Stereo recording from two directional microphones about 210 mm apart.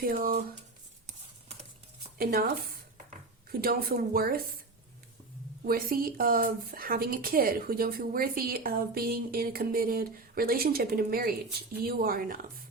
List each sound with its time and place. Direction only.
0.0 s speech: 45° right (ahead or behind)
2.1 s speech: 45° right (ahead or behind)
3.5 s speech: 45° right (ahead or behind)
5.6 s speech: 45° right (ahead or behind)